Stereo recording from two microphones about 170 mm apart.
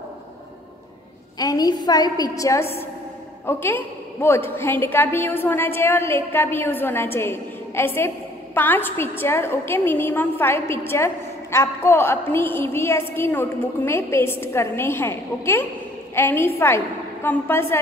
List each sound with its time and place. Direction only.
1.4 s a woman's voice: 20° left (ahead or behind)